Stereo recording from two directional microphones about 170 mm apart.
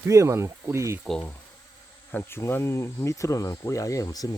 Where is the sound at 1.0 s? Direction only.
5° left (ahead or behind).